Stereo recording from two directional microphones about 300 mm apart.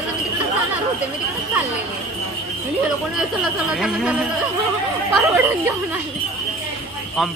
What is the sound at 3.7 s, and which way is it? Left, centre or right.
Speech, centre.